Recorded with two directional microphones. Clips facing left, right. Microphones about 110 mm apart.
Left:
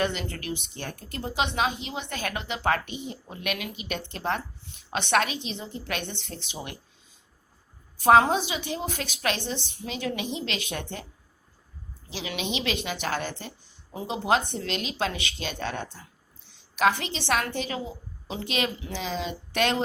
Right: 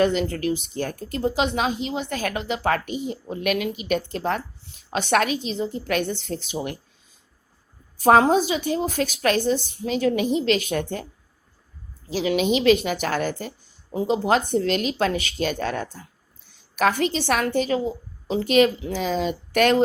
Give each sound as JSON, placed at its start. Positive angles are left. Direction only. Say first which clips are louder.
{"t": 0.0, "sound": "a woman's voice", "louder": "right 8 dB", "side_deg": -35}
{"t": 7.9, "sound": "a woman's voice", "louder": "right 3 dB", "side_deg": -40}
{"t": 12.0, "sound": "a woman's voice", "louder": "right 11 dB", "side_deg": -40}